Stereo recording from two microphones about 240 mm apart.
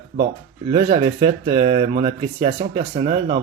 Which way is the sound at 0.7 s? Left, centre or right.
Right.